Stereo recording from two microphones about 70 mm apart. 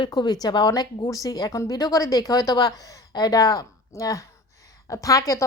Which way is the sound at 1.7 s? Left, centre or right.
Left.